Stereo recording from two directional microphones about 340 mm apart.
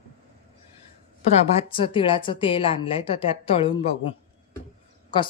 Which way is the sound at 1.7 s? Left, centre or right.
Centre.